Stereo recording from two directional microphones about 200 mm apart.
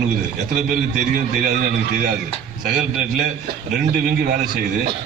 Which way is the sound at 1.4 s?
40° right (ahead or behind).